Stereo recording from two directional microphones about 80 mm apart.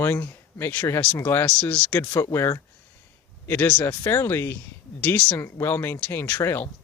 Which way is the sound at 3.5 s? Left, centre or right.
Left.